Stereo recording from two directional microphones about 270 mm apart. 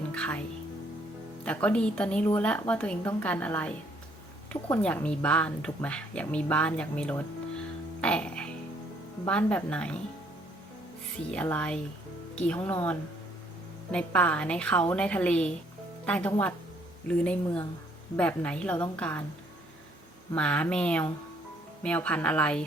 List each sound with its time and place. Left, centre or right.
0.1 s music: centre
1.5 s a woman's voice: centre
8.0 s music: centre
9.2 s a woman's voice: centre
11.3 s a woman's voice: centre
20.3 s a woman's voice: centre